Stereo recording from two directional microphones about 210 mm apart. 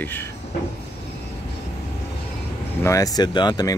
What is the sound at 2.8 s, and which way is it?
Speech, 15° left (ahead or behind).